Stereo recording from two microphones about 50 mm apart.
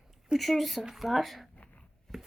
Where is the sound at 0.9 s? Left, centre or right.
Centre.